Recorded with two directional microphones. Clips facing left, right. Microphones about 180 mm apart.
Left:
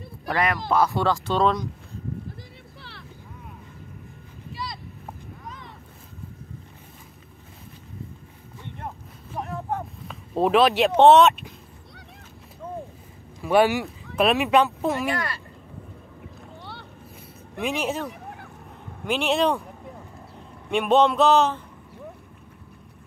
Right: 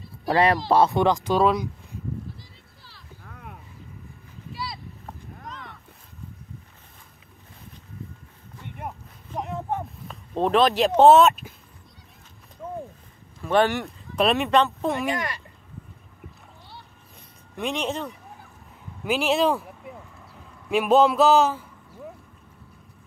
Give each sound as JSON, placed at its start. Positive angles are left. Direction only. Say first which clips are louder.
{"t": 0.3, "sound": "speech", "louder": "right 4 dB", "side_deg": -30}
{"t": 2.8, "sound": "vehicle", "louder": "left 9 dB", "side_deg": 70}
{"t": 3.3, "sound": "vehicle", "louder": "right 5 dB", "side_deg": -65}
{"t": 4.5, "sound": "boat", "louder": "even", "side_deg": -5}
{"t": 8.6, "sound": "a sound", "louder": "right 1 dB", "side_deg": -15}
{"t": 10.0, "sound": "speech", "louder": "left 2 dB", "side_deg": 5}
{"t": 13.4, "sound": "speech", "louder": "left 2 dB", "side_deg": 10}
{"t": 15.0, "sound": "speech", "louder": "even", "side_deg": -15}
{"t": 16.5, "sound": "boat", "louder": "left 6 dB", "side_deg": 65}
{"t": 17.6, "sound": "speech", "louder": "left 1 dB", "side_deg": 5}
{"t": 18.1, "sound": "a sound", "louder": "left 6 dB", "side_deg": 70}
{"t": 19.0, "sound": "speech", "louder": "right 1 dB", "side_deg": 0}
{"t": 20.7, "sound": "speech", "louder": "right 1 dB", "side_deg": -5}